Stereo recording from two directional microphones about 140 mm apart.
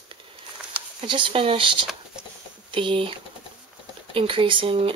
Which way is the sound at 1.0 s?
35° right (ahead or behind).